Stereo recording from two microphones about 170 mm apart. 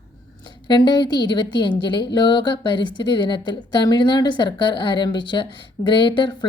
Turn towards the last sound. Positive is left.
turn(degrees=25)  # may be behind; listen again after turning